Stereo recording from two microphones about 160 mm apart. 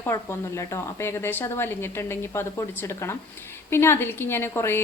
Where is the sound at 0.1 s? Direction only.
15° left (ahead or behind).